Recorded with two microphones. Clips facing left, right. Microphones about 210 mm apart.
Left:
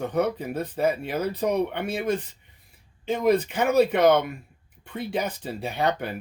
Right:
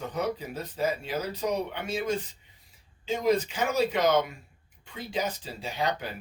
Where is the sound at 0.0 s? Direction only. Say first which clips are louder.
Left 6 dB; 55° left (ahead or behind).